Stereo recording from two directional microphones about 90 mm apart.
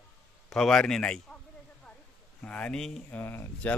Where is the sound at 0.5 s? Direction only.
5° left (ahead or behind).